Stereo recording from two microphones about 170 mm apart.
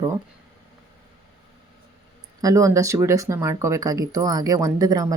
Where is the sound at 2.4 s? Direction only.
20° right (ahead or behind).